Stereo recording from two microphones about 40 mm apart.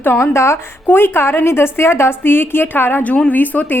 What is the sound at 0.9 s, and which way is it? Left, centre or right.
Speech, left.